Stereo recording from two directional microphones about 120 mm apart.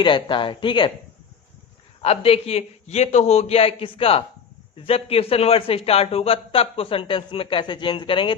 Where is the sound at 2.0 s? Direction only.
55° left (ahead or behind).